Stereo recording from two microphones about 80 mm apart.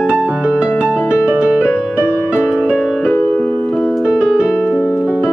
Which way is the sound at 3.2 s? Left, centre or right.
Left.